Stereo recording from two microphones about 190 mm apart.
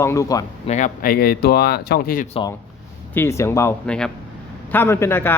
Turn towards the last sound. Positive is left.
turn(degrees=10)  # may be behind; listen again after turning